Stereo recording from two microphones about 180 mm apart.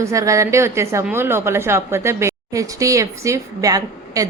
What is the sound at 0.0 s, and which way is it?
A woman's voice, 15° right (ahead or behind).